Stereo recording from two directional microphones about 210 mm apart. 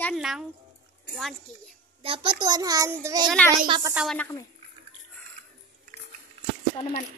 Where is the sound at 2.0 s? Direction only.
25° right (ahead or behind).